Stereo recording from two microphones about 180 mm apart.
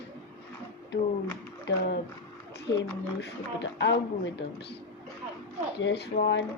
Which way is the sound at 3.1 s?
75° left (ahead or behind).